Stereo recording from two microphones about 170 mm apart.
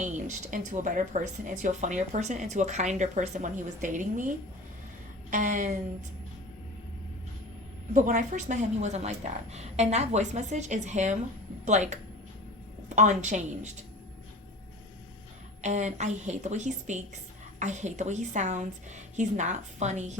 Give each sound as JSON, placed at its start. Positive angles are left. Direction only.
{"t": 0.0, "sound": "speech", "side_deg": -45}
{"t": 5.3, "sound": "speech", "side_deg": -50}
{"t": 7.9, "sound": "speech", "side_deg": -50}
{"t": 13.0, "sound": "speech", "side_deg": -45}
{"t": 15.6, "sound": "speech", "side_deg": -45}